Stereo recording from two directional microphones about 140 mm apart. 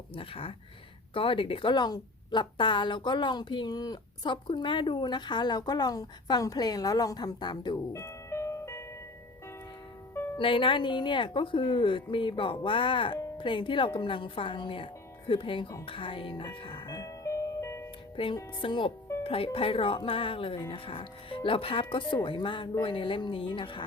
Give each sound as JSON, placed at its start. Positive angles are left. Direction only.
{"t": 0.1, "sound": "a woman's voice", "side_deg": 40}
{"t": 7.9, "sound": "music", "side_deg": 20}
{"t": 10.3, "sound": "a woman's voice", "side_deg": 35}
{"t": 15.9, "sound": "music", "side_deg": 40}
{"t": 18.2, "sound": "a woman's voice", "side_deg": 40}